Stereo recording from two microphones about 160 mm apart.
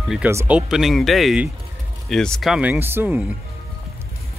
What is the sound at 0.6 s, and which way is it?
Speech, 5° right (ahead or behind).